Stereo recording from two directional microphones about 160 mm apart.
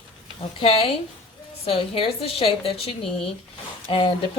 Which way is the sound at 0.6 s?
35° left (ahead or behind).